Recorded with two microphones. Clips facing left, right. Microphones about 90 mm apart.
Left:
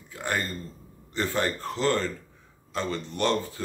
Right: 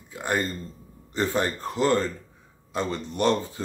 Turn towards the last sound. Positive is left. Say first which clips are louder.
# right 3 dB
turn(degrees=-20)  # may be behind; listen again after turning